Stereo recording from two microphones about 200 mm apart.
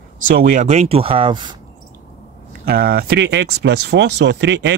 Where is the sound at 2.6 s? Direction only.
50° right (ahead or behind).